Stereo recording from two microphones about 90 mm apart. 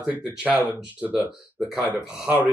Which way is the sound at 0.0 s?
15° right (ahead or behind).